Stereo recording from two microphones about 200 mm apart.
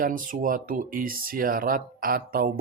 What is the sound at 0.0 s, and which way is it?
Speech, 40° right (ahead or behind).